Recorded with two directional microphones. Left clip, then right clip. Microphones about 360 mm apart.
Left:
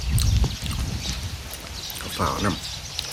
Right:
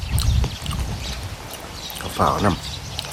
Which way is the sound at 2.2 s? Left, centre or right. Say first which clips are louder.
Right 6 dB; centre.